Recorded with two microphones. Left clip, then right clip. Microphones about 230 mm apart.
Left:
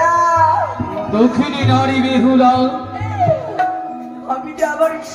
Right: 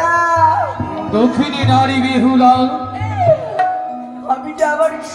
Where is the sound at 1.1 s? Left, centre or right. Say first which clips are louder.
Even; right.